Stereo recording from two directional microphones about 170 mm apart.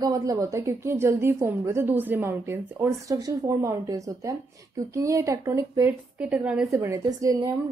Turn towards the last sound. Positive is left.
turn(degrees=-20)  # may be behind; listen again after turning